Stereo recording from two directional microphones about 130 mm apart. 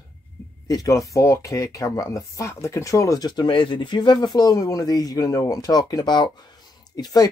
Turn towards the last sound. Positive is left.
turn(degrees=30)  # may be behind; listen again after turning